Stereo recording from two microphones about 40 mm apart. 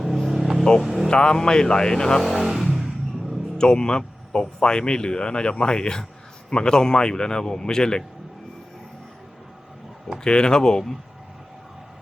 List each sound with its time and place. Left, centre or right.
0.0 s vehicle: centre
1.1 s speech: left
2.2 s vehicle: centre
3.6 s speech: centre
10.2 s speech: left